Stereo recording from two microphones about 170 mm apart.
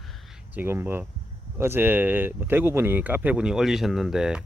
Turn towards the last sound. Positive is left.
turn(degrees=-5)  # may be behind; listen again after turning